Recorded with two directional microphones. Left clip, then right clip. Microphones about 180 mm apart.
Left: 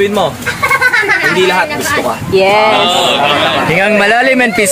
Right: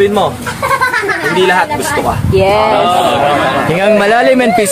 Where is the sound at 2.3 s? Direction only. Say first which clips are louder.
Left 2 dB; 10° left (ahead or behind).